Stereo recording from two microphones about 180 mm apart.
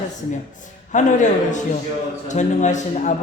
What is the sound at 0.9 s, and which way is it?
Music, 45° left (ahead or behind).